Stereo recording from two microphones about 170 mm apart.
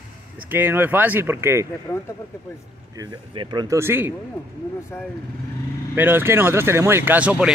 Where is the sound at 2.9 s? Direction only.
25° right (ahead or behind).